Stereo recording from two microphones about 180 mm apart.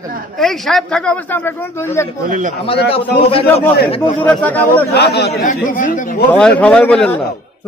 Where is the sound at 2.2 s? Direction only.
45° right (ahead or behind).